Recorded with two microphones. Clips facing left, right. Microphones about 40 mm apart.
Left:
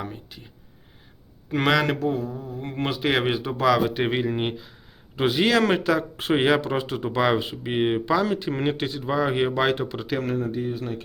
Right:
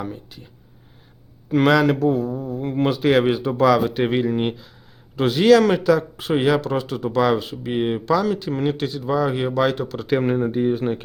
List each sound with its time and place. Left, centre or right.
0.0 s speech: centre
1.5 s a man's voice: centre
10.2 s speech: right